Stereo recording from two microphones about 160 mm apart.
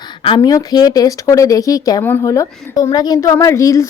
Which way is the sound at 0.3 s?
25° left (ahead or behind).